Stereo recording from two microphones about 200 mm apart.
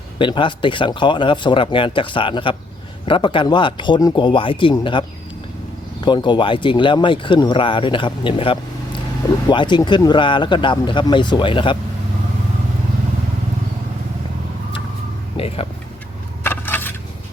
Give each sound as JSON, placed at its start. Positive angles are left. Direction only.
{"t": 0.2, "sound": "speech", "side_deg": 25}
{"t": 15.4, "sound": "speech", "side_deg": 30}
{"t": 16.4, "sound": "coin", "side_deg": 10}